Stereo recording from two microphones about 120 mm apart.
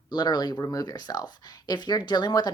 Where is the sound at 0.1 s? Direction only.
35° left (ahead or behind).